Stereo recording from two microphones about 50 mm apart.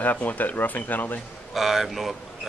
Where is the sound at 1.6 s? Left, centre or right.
Centre.